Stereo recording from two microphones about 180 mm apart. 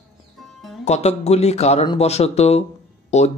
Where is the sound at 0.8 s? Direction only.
35° left (ahead or behind).